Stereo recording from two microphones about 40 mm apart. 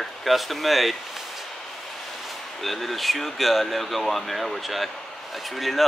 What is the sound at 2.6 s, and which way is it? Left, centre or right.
Speech, centre.